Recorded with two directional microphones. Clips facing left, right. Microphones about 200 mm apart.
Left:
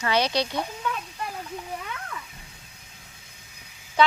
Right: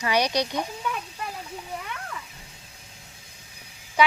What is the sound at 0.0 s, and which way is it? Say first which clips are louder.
Speech: even; 15° right (ahead or behind).